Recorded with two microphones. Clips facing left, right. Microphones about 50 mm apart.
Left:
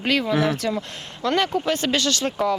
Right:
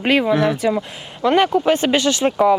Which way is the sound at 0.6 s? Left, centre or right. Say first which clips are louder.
Right 6 dB; centre.